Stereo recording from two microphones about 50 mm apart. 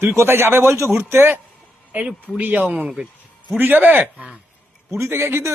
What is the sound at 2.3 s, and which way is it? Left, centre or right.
Speech, right.